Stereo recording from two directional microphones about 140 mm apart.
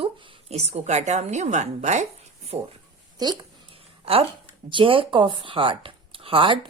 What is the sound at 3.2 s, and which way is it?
Speech, 30° right (ahead or behind).